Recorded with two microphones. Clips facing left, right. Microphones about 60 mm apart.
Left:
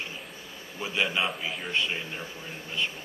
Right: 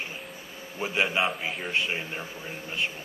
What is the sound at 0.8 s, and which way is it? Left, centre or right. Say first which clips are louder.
Speech: right 2 dB; right.